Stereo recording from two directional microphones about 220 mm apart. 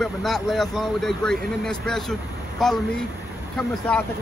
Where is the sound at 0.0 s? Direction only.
Centre (ahead or behind).